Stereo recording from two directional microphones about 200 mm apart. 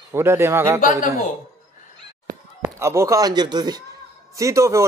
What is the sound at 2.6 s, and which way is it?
Speech, 15° right (ahead or behind).